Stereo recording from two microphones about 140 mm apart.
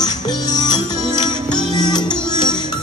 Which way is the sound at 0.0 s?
30° left (ahead or behind).